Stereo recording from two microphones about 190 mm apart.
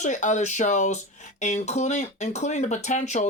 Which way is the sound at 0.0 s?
40° left (ahead or behind).